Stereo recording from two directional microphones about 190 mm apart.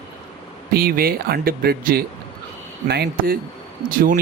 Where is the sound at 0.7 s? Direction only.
50° right (ahead or behind).